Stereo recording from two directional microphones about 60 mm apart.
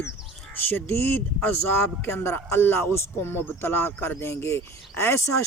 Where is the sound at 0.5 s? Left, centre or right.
Left.